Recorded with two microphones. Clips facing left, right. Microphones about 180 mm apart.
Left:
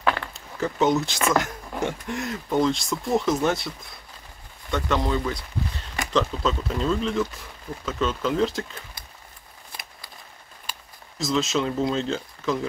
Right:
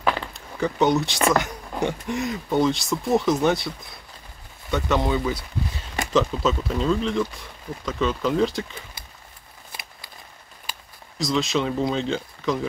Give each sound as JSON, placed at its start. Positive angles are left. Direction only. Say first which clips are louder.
{"t": 0.3, "sound": "speech", "louder": "right 2 dB", "side_deg": 0}
{"t": 10.7, "sound": "speech", "louder": "right 1 dB", "side_deg": 0}